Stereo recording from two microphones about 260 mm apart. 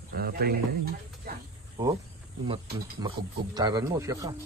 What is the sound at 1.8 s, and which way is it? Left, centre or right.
Speech, centre.